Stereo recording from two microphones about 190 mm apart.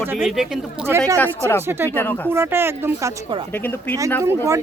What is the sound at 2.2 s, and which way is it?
Speech, 10° right (ahead or behind).